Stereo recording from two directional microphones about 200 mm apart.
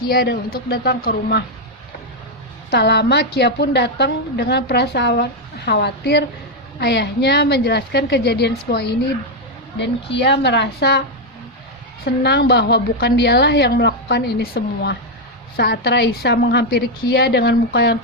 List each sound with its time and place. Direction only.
0.0 s a woman's voice: 50° left (ahead or behind)
2.6 s a woman's voice: 55° left (ahead or behind)
12.0 s a woman's voice: 55° left (ahead or behind)